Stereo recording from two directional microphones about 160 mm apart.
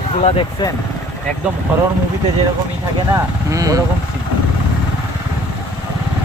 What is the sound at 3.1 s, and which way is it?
Speech, 20° right (ahead or behind).